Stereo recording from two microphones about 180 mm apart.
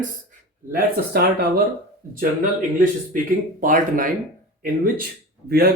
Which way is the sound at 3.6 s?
50° right (ahead or behind).